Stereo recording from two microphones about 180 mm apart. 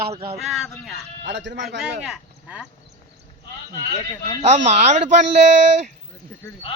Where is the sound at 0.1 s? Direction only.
30° right (ahead or behind).